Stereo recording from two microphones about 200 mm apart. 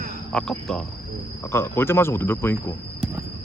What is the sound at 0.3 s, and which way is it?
Cricket, centre (ahead or behind).